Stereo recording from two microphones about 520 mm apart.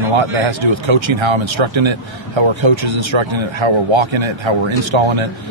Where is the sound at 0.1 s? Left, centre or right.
Right.